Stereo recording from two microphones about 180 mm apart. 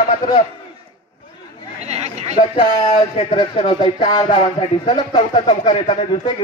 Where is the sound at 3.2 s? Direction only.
30° left (ahead or behind).